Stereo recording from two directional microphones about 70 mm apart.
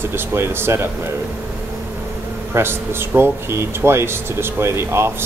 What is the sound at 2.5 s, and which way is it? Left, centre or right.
Speech, right.